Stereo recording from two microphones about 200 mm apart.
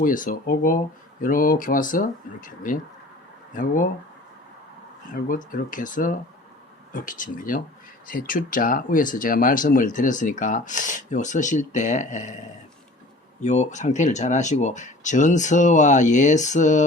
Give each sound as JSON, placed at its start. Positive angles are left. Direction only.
{"t": 0.0, "sound": "speech", "side_deg": 45}
{"t": 5.1, "sound": "speech", "side_deg": 45}
{"t": 13.4, "sound": "speech", "side_deg": 35}